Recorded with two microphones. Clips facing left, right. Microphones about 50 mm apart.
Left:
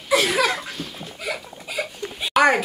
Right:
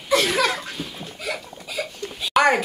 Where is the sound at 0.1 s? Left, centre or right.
Centre.